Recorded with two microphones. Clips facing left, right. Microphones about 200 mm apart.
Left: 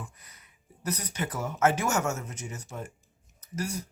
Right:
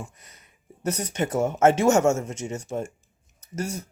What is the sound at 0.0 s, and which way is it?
Speech, 25° right (ahead or behind).